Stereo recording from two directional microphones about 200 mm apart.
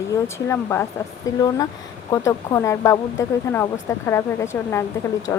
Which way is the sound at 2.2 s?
15° left (ahead or behind).